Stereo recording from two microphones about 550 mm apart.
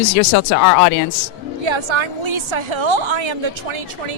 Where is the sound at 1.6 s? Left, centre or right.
Right.